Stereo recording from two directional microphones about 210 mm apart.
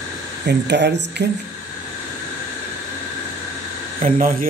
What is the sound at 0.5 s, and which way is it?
Speech, 55° right (ahead or behind).